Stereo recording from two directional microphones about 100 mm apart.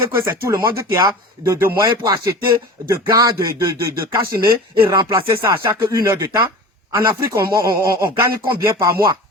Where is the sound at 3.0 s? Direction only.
35° right (ahead or behind).